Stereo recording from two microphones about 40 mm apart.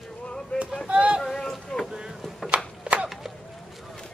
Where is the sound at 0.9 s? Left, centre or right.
Right.